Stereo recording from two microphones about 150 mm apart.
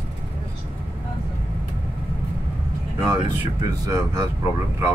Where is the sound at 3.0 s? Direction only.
20° right (ahead or behind).